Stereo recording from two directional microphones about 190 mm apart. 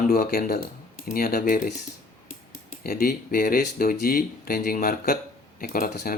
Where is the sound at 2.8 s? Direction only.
50° left (ahead or behind).